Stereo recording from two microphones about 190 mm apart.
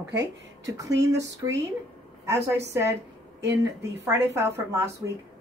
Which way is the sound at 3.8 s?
15° right (ahead or behind).